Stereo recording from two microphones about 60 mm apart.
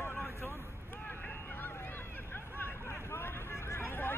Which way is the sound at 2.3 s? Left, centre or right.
Left.